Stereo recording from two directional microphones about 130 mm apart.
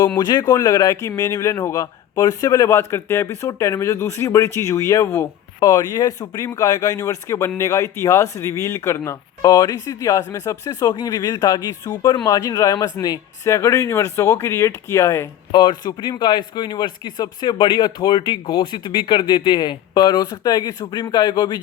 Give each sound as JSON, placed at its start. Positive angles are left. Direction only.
{"t": 0.2, "sound": "speech", "side_deg": 35}
{"t": 15.5, "sound": "speech", "side_deg": 35}